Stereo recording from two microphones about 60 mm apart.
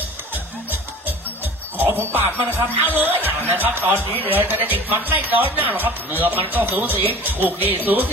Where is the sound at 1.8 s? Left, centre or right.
Right.